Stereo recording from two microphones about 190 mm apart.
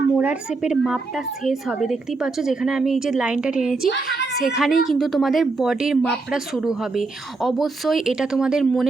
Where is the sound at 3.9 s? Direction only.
55° left (ahead or behind).